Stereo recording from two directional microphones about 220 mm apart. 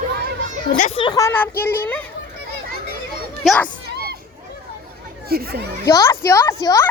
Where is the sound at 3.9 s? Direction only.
45° right (ahead or behind).